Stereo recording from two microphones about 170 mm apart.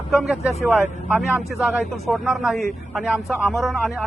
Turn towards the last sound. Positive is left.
turn(degrees=0)  # may be behind; listen again after turning